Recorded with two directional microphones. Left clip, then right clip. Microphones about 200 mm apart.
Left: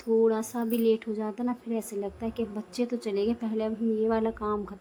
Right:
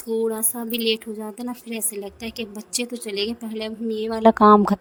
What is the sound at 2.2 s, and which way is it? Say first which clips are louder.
Speech: right 2 dB; 55° right (ahead or behind).